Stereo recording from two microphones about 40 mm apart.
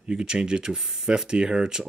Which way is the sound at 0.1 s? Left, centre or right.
Centre.